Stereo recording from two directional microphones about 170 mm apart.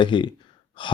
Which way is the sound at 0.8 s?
30° left (ahead or behind).